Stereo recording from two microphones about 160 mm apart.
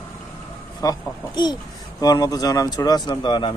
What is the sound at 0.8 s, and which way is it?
A man's voice, 20° left (ahead or behind).